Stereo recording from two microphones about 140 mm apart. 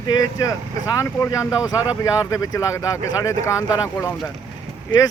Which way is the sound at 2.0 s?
25° left (ahead or behind).